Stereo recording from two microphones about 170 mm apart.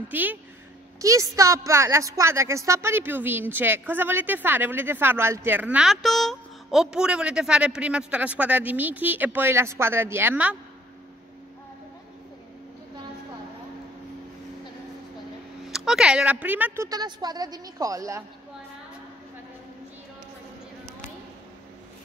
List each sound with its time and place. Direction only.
0.1 s a woman's voice: 10° right (ahead or behind)
15.7 s a woman's voice: 5° right (ahead or behind); by 18.2 s 20° right (ahead or behind)